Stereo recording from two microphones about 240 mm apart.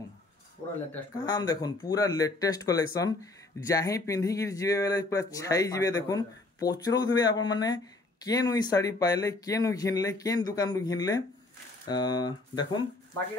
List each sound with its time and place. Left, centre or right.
1.2 s speech: centre